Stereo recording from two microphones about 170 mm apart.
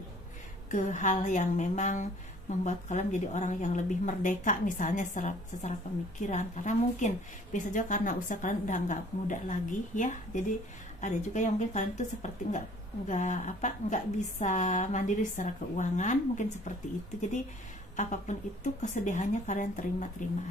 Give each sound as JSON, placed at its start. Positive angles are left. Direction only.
{"t": 0.7, "sound": "a woman's voice", "side_deg": 45}
{"t": 17.9, "sound": "a woman's voice", "side_deg": 45}